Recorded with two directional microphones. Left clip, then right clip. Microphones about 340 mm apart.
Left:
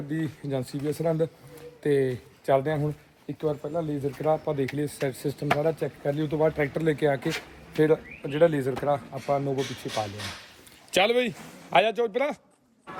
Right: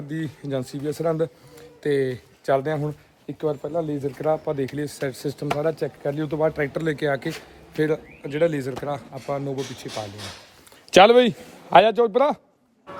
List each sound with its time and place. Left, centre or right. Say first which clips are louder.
0.1 s speech: right 2 dB; centre
10.9 s a man's voice: right 10 dB; right